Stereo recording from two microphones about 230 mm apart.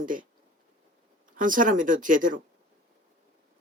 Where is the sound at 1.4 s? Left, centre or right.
Right.